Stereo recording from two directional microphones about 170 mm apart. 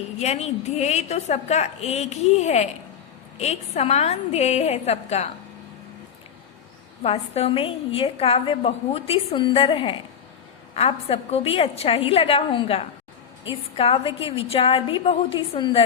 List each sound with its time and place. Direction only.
0.2 s a woman's voice: 40° left (ahead or behind)
7.0 s a woman's voice: 35° left (ahead or behind)